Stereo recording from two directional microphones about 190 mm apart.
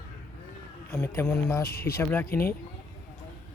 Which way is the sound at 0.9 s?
10° left (ahead or behind).